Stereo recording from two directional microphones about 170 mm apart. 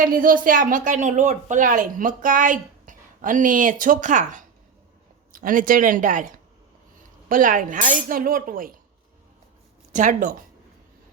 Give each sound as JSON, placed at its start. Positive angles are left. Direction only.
{"t": 0.0, "sound": "speech", "side_deg": -55}
{"t": 9.9, "sound": "speech", "side_deg": -45}